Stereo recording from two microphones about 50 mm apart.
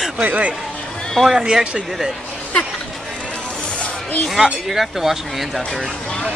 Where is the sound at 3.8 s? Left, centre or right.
Left.